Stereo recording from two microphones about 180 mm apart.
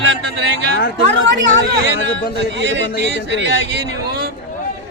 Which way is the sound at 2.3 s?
75° right (ahead or behind).